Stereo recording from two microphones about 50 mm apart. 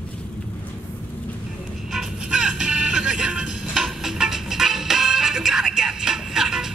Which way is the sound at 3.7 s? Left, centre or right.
Centre.